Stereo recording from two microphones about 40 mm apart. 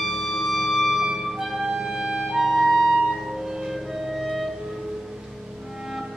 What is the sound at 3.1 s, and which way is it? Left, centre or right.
Music, centre.